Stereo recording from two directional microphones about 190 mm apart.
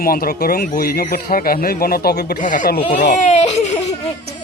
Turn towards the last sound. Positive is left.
turn(degrees=35)  # may be behind; listen again after turning